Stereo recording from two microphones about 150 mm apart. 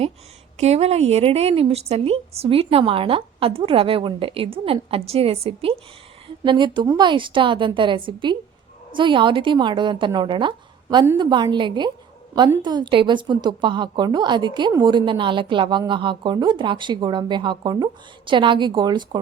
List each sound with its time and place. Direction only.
0.6 s a woman's voice: 45° right (ahead or behind); by 19.2 s 30° right (ahead or behind)